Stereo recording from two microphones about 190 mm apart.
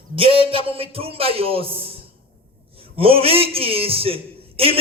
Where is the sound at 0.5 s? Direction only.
30° right (ahead or behind).